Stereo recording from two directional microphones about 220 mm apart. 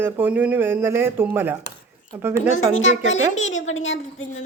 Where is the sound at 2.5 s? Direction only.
60° left (ahead or behind).